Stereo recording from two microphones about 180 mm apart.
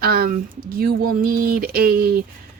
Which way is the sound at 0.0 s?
55° right (ahead or behind).